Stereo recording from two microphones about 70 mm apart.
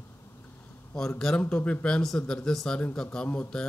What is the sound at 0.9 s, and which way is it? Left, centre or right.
Speech, centre.